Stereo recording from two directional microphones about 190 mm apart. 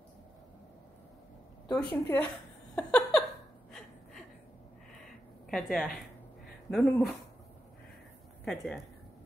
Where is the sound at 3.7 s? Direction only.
Centre (ahead or behind).